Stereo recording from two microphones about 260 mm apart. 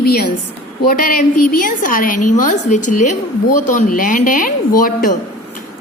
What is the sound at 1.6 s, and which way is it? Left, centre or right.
A woman's voice, left.